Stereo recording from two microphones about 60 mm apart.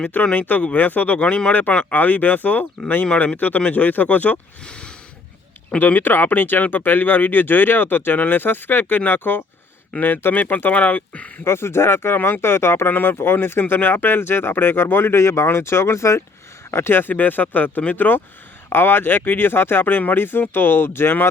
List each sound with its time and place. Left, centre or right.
0.0 s speech: left
4.6 s a sound: centre
5.8 s speech: left
11.4 s speech: left
16.7 s speech: left